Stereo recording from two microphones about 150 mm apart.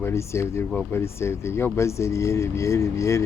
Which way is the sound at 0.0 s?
20° left (ahead or behind).